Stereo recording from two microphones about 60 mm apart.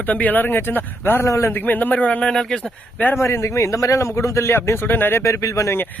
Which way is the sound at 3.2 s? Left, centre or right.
Left.